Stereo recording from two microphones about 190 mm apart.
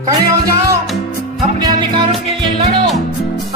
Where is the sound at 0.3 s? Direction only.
15° right (ahead or behind).